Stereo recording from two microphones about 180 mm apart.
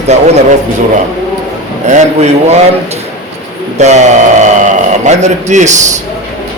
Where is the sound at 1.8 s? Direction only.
40° right (ahead or behind).